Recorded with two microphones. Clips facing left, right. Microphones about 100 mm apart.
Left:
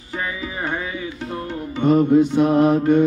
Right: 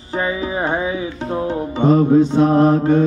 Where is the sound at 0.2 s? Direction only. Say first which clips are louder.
Right 7 dB; 25° right (ahead or behind).